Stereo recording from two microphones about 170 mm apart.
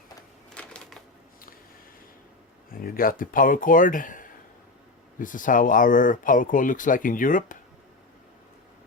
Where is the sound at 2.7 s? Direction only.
60° left (ahead or behind).